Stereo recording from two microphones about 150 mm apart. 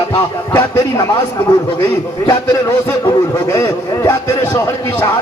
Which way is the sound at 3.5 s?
20° left (ahead or behind).